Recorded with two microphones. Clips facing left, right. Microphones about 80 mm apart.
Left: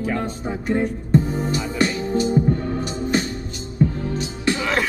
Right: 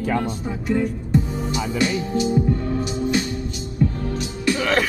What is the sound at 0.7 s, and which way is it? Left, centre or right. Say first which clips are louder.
Music: left 1 dB; left.